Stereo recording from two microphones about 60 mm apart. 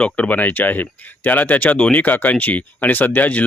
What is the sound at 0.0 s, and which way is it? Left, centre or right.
Speech, left.